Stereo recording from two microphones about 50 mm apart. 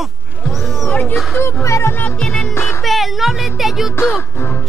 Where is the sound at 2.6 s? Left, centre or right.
Left.